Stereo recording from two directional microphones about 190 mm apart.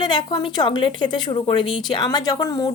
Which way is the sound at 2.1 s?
20° left (ahead or behind).